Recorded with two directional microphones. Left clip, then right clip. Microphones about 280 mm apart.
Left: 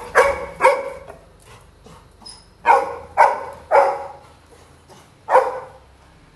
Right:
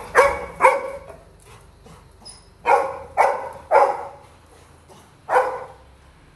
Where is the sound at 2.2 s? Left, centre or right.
Centre.